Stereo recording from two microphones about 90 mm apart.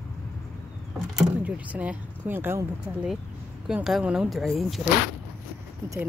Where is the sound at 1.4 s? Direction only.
15° right (ahead or behind).